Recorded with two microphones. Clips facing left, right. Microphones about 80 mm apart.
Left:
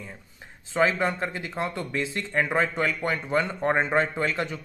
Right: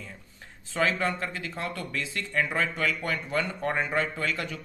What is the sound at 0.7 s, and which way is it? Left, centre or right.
Speech, left.